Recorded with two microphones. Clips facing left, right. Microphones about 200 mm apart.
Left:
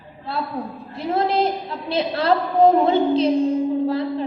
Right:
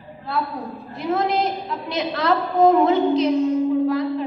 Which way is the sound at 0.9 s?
30° left (ahead or behind).